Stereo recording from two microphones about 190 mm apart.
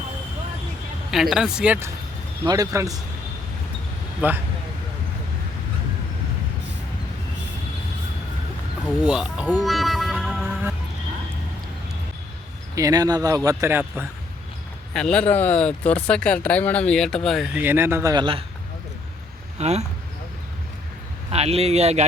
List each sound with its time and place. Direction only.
1.1 s speech: centre (ahead or behind)
2.4 s speech: 20° right (ahead or behind)
4.2 s a man's voice: 10° right (ahead or behind)
9.0 s speech: 5° right (ahead or behind)
9.6 s music: centre (ahead or behind)
12.7 s a man's voice: 20° right (ahead or behind)
14.9 s speech: 5° left (ahead or behind); by 18.4 s 25° right (ahead or behind)
19.5 s speech: 35° right (ahead or behind)
21.2 s speech: 35° right (ahead or behind)